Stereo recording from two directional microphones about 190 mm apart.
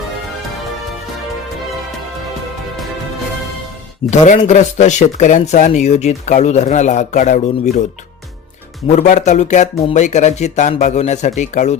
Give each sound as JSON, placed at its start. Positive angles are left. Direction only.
{"t": 4.1, "sound": "speech", "side_deg": 35}
{"t": 9.0, "sound": "speech", "side_deg": 40}